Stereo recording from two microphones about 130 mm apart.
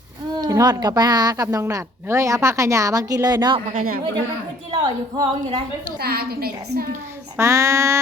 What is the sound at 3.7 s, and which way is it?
Speech, 90° right.